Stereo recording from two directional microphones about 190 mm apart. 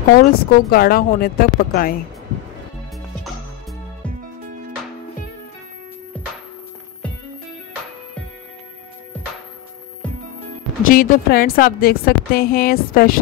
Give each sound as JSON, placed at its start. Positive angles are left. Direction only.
{"t": 0.1, "sound": "a woman's voice", "side_deg": 50}
{"t": 6.2, "sound": "music", "side_deg": 5}
{"t": 10.0, "sound": "music", "side_deg": 5}
{"t": 10.9, "sound": "a woman's voice", "side_deg": 50}